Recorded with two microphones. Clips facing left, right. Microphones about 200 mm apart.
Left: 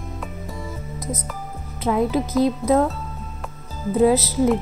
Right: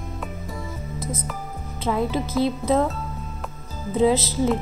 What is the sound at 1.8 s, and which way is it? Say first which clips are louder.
Music: left 3 dB; 15° left (ahead or behind).